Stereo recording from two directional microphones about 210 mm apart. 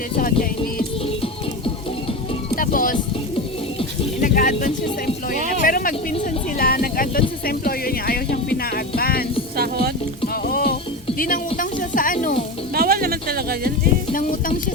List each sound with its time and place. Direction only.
2.6 s music: 40° left (ahead or behind)
4.2 s speech: 40° left (ahead or behind)
6.6 s music: 45° left (ahead or behind)
9.6 s music: 50° right (ahead or behind)
10.4 s music: 50° left (ahead or behind)
12.7 s a sound: 45° right (ahead or behind)
14.1 s a sound: 40° left (ahead or behind)